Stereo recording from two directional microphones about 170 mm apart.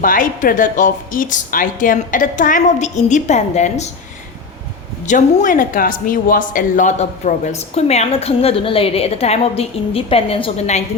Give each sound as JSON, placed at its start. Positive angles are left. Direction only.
{"t": 0.0, "sound": "a woman's voice", "side_deg": 55}
{"t": 5.0, "sound": "speech", "side_deg": 50}